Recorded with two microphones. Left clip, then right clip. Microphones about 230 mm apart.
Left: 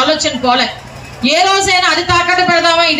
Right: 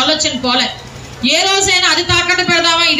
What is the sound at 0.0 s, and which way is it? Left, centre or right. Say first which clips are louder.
A woman's voice: left 2 dB; left.